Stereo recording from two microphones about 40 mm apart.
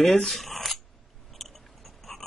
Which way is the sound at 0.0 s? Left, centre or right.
Centre.